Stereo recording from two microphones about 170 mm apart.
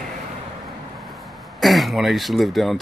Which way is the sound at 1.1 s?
Centre (ahead or behind).